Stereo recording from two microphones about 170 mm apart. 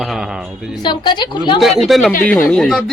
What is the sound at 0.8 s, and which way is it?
Speech, 25° left (ahead or behind).